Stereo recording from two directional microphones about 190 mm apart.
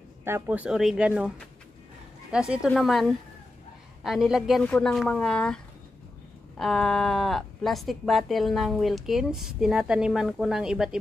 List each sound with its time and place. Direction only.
0.2 s speech: 10° right (ahead or behind)
2.3 s speech: 5° right (ahead or behind)